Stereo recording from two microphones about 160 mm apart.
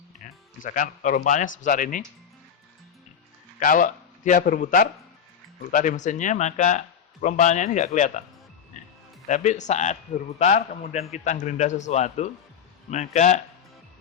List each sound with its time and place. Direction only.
0.6 s speech: 55° left (ahead or behind)
3.6 s a man's voice: 55° left (ahead or behind)
8.7 s music: 50° left (ahead or behind)
9.2 s a man's voice: 45° left (ahead or behind)